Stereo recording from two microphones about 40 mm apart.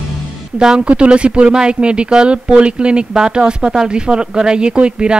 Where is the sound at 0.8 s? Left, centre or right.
Right.